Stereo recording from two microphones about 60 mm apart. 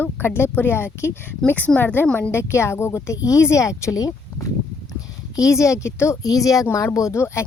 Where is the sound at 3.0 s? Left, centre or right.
Left.